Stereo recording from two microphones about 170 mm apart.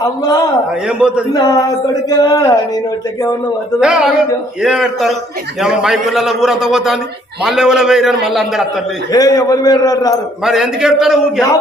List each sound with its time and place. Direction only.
0.9 s a man's voice: 5° right (ahead or behind)
1.3 s a man's voice: 20° left (ahead or behind)
3.8 s a man's voice: 5° right (ahead or behind)
9.1 s a man's voice: 20° left (ahead or behind)
10.4 s a man's voice: 5° right (ahead or behind)